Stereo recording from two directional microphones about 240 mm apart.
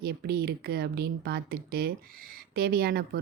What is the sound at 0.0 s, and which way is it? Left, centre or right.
A woman's voice, right.